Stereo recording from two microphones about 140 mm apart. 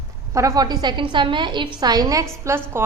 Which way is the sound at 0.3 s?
25° right (ahead or behind).